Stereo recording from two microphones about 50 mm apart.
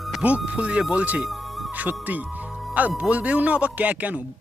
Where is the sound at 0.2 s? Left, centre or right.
Right.